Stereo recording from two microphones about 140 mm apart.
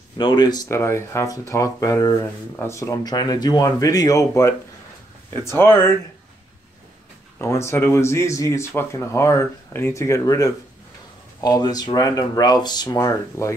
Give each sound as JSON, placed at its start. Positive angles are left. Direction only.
{"t": 0.2, "sound": "speech", "side_deg": 30}
{"t": 0.7, "sound": "speech", "side_deg": 20}
{"t": 7.3, "sound": "speech", "side_deg": 20}